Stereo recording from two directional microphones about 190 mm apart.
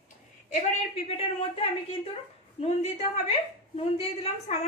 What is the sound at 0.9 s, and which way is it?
A woman's voice, 35° left (ahead or behind).